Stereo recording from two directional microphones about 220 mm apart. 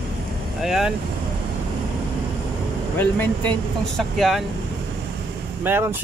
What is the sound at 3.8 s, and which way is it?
Speech, centre (ahead or behind).